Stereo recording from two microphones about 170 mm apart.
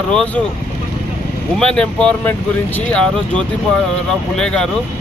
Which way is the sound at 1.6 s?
5° left (ahead or behind).